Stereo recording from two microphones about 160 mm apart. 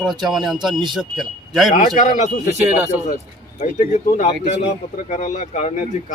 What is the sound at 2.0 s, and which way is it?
Speech, 45° left (ahead or behind).